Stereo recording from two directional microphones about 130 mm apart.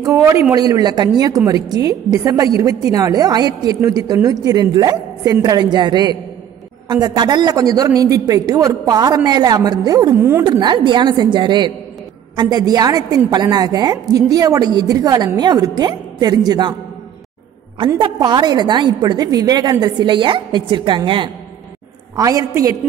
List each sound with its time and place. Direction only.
0.0 s speech: 20° right (ahead or behind)
0.6 s a woman's voice: 30° right (ahead or behind)
10.1 s speech: 20° right (ahead or behind)
10.4 s a woman's voice: 35° right (ahead or behind)
17.7 s a woman's voice: 40° right (ahead or behind)
22.1 s speech: 25° right (ahead or behind)